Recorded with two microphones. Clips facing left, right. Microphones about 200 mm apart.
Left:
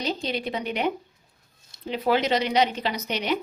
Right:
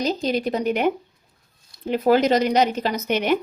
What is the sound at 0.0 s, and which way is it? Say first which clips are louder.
Speech: right 6 dB; 45° right (ahead or behind).